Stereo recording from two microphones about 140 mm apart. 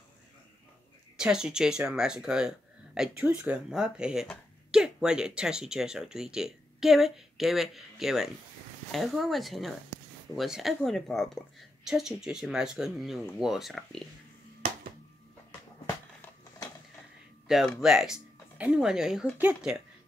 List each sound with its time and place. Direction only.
1.1 s a woman's voice: 5° right (ahead or behind)
17.5 s a woman's voice: centre (ahead or behind)